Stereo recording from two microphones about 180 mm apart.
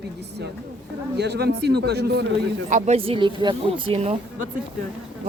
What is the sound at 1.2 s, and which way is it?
A man's voice, 65° right (ahead or behind).